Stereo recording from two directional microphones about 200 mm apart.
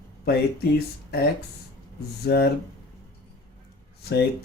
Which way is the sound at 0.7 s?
50° left (ahead or behind).